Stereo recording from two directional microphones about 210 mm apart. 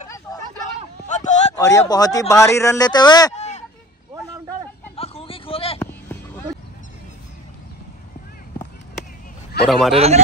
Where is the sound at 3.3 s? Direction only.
35° left (ahead or behind).